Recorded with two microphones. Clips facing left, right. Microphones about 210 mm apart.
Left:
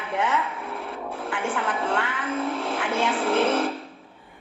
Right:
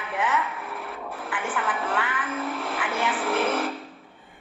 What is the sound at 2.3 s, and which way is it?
Music, centre (ahead or behind).